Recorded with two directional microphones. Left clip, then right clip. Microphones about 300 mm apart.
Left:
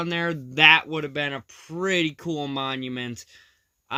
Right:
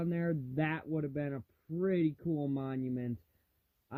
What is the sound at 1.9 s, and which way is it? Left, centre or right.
Speech, left.